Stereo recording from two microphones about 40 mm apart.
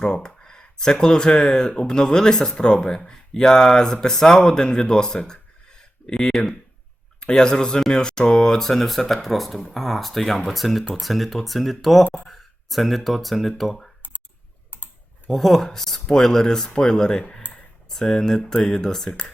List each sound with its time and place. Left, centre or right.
0.0 s speech: centre
12.2 s a sound: centre
13.1 s speech: centre
14.7 s typing: left
15.3 s speech: centre